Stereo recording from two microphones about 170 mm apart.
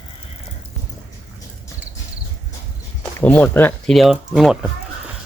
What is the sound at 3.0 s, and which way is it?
Speech, 10° left (ahead or behind).